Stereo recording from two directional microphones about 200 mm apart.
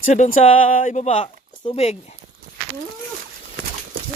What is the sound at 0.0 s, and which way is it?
Speech, 40° left (ahead or behind).